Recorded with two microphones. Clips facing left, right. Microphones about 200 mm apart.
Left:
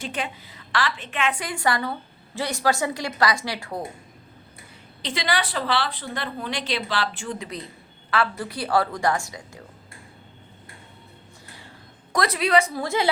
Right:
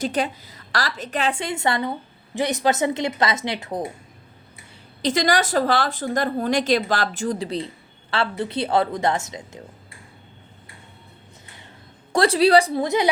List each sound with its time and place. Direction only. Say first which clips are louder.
0.0 s a woman's voice: right 7 dB; 40° right (ahead or behind)
1.3 s a woman's voice: even; 25° right (ahead or behind)
5.0 s a woman's voice: right 6 dB; 45° right (ahead or behind); by 9.6 s 20° right (ahead or behind)
12.1 s a woman's voice: right 6 dB; 30° right (ahead or behind)
12.8 s a woman's voice: right 4 dB; 20° right (ahead or behind)